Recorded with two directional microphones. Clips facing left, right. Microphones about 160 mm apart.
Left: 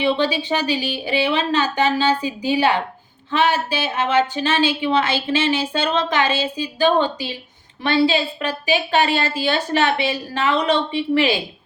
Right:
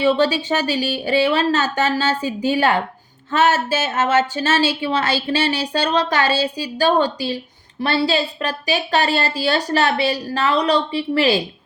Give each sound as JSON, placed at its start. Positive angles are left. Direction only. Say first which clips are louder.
{"t": 0.0, "sound": "a woman's voice", "louder": "right 3 dB", "side_deg": -45}